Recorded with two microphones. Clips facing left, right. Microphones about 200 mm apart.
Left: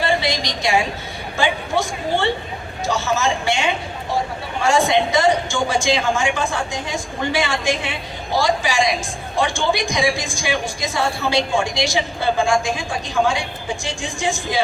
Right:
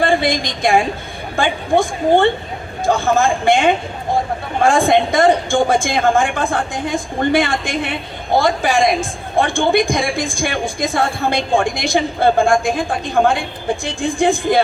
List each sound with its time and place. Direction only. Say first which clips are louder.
0.0 s a woman's voice: right 5 dB; 50° right (ahead or behind)